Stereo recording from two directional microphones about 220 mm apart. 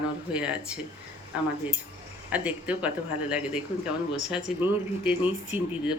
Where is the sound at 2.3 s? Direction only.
5° right (ahead or behind).